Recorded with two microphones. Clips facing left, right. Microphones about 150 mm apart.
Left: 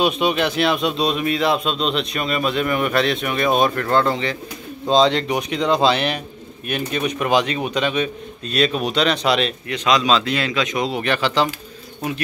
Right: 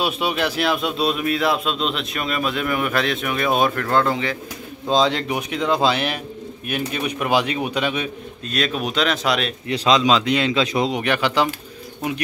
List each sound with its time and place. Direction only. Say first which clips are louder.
0.0 s speech: left 3 dB; 5° right (ahead or behind)
8.5 s speech: left 4 dB; centre (ahead or behind)
9.7 s speech: right 2 dB; 25° right (ahead or behind)
10.9 s speech: even; 10° right (ahead or behind)